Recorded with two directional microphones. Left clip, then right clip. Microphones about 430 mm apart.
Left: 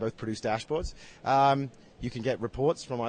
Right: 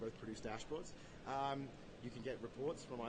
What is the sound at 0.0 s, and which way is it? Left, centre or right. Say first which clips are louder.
Speech: left 15 dB; left.